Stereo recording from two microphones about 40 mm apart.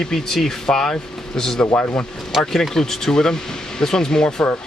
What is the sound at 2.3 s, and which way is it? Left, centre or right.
Speech, centre.